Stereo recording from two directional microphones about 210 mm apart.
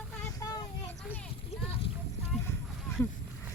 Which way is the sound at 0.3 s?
15° left (ahead or behind).